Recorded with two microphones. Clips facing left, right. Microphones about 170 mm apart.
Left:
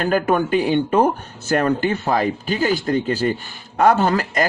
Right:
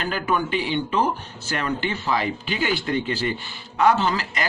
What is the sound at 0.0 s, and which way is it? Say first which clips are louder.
Speech: left 6 dB; 50° left (ahead or behind).